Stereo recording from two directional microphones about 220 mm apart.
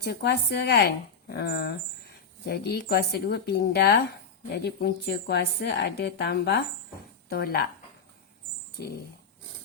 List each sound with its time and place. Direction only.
0.0 s speech: 50° left (ahead or behind)